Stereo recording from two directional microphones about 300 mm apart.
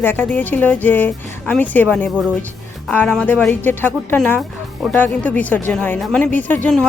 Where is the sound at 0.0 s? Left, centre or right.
Centre.